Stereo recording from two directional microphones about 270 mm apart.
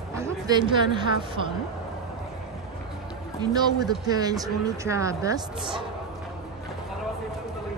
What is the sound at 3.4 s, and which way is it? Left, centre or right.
Speech, centre.